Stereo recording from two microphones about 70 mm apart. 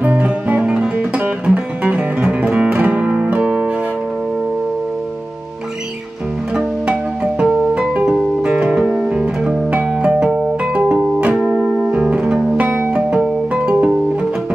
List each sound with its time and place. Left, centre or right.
0.0 s music: right
7.7 s music: centre
11.3 s music: centre
11.9 s music: centre